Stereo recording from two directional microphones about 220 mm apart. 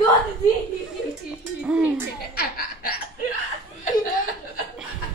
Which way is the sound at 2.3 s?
45° left (ahead or behind).